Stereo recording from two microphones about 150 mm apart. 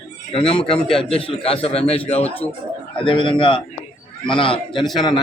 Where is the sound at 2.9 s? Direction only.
35° left (ahead or behind).